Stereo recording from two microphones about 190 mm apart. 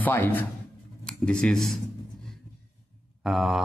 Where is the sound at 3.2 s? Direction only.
Centre (ahead or behind).